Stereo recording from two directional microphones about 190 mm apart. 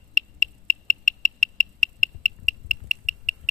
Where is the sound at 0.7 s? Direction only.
35° right (ahead or behind).